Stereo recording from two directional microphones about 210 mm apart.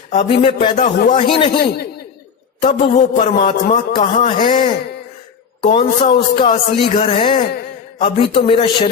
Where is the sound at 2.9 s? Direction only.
35° left (ahead or behind).